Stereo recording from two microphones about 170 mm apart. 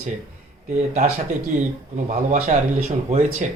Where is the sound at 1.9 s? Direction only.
45° right (ahead or behind).